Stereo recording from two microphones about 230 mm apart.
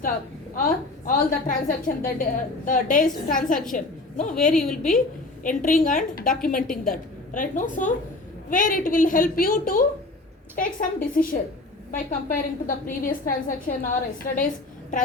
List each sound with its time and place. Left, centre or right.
0.5 s a woman's voice: left
4.4 s a woman's voice: centre
4.9 s a woman's voice: left